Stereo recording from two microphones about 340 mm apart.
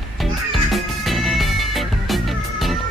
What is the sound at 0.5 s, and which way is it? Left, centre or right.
Music, centre.